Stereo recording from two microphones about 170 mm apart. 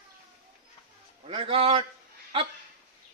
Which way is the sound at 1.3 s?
30° right (ahead or behind).